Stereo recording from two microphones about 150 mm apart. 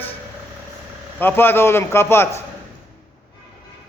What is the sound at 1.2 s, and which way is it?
A man's voice, 15° left (ahead or behind).